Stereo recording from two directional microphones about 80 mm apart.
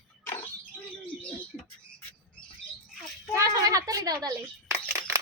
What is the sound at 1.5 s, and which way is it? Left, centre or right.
Speech, centre.